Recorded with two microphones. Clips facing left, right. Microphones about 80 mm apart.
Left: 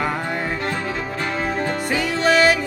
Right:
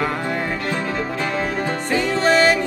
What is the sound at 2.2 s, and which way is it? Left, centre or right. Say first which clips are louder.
Music: even; right.